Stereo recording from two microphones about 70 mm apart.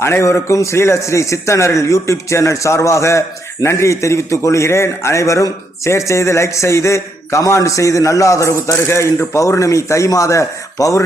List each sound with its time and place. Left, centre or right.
0.0 s a man's voice: left